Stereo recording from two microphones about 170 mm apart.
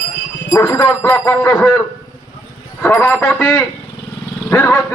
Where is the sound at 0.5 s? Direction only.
15° left (ahead or behind).